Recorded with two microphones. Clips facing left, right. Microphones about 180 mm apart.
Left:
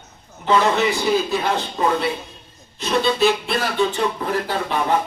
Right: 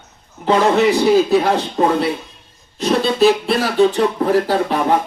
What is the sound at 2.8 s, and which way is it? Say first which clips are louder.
Speech: right 4 dB; 35° right (ahead or behind).